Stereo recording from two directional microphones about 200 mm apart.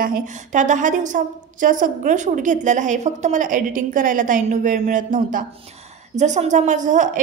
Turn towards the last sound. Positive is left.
turn(degrees=-40)  # may be behind; listen again after turning